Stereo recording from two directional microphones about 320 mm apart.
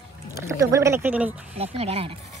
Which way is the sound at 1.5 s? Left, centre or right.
Centre.